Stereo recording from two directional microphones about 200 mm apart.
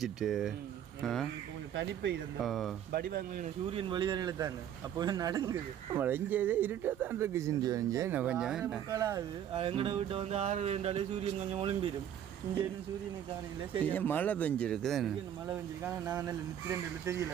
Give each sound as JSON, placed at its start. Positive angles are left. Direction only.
{"t": 0.0, "sound": "speech", "side_deg": 0}
{"t": 2.4, "sound": "speech", "side_deg": 0}
{"t": 2.9, "sound": "speech", "side_deg": -50}
{"t": 3.7, "sound": "speech", "side_deg": -25}
{"t": 8.9, "sound": "speech", "side_deg": -15}
{"t": 9.6, "sound": "speech", "side_deg": -25}
{"t": 13.8, "sound": "speech", "side_deg": 10}
{"t": 15.8, "sound": "speech", "side_deg": -10}